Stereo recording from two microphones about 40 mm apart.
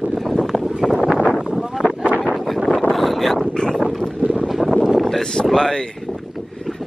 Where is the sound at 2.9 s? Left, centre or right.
Centre.